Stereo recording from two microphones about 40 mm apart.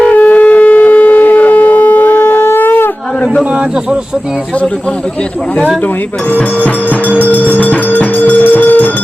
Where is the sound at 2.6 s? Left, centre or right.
Left.